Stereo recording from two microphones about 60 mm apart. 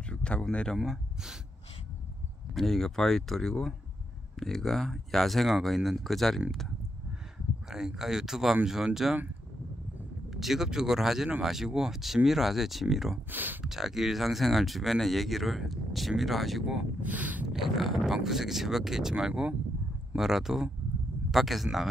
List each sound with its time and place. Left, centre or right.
0.1 s speech: centre
2.5 s speech: centre
7.7 s speech: centre
10.3 s speech: centre
13.3 s speech: right
13.7 s speech: centre
17.0 s speech: right
17.5 s speech: centre